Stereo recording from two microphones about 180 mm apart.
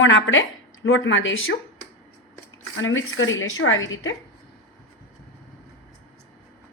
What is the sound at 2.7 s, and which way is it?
Speech, 90° left.